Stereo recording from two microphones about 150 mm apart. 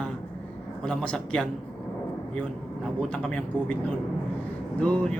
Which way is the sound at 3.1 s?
10° left (ahead or behind).